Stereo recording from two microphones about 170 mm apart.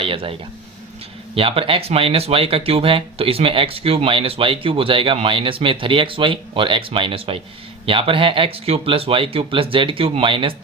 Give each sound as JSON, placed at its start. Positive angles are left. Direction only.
{"t": 0.0, "sound": "speech", "side_deg": -30}
{"t": 1.4, "sound": "speech", "side_deg": -35}